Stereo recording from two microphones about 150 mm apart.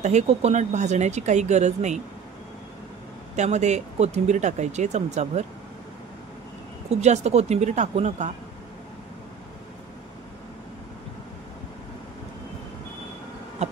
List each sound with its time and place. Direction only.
0.0 s speech: 50° right (ahead or behind)
3.3 s speech: 50° right (ahead or behind)
6.9 s speech: 50° right (ahead or behind)
13.6 s a sound: 50° right (ahead or behind)